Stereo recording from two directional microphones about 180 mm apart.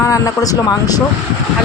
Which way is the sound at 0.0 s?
20° left (ahead or behind).